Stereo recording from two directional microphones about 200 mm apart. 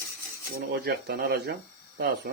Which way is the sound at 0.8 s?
55° right (ahead or behind).